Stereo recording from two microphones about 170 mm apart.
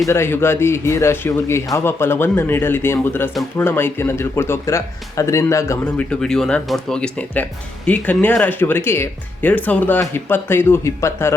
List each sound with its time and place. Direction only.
0.1 s speech: 15° left (ahead or behind)